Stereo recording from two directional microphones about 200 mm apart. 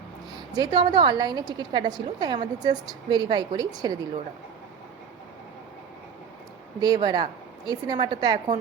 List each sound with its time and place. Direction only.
0.5 s a woman's voice: 20° right (ahead or behind)
6.7 s a woman's voice: 20° right (ahead or behind)